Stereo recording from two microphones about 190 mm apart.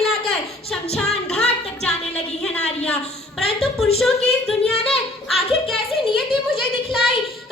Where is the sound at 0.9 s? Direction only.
5° left (ahead or behind).